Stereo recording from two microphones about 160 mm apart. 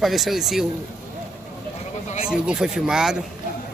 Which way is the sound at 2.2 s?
5° right (ahead or behind).